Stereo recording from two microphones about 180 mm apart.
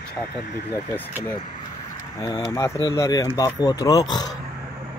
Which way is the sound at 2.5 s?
20° left (ahead or behind).